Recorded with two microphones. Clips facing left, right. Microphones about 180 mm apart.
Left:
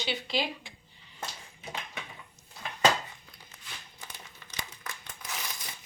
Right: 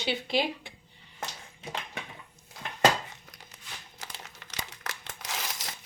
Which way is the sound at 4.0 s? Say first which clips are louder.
Right 3 dB; 85° right.